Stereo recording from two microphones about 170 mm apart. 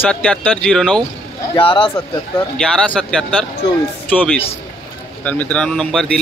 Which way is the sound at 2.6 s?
5° left (ahead or behind).